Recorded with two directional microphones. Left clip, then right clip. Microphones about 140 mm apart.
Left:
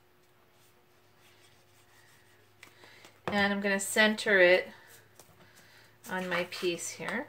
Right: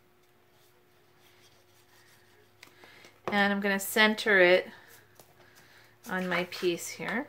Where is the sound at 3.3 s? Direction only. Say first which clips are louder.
Right 2 dB; 30° right (ahead or behind).